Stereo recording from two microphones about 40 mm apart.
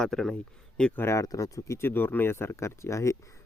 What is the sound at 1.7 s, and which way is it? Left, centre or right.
Speech, left.